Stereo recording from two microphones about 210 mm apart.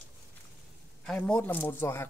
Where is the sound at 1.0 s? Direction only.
5° left (ahead or behind).